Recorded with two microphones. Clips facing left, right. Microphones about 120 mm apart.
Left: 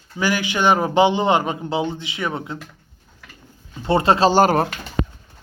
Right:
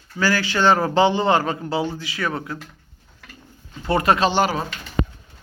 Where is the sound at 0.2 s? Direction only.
15° left (ahead or behind).